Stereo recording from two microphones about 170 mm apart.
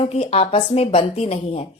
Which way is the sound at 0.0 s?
35° left (ahead or behind).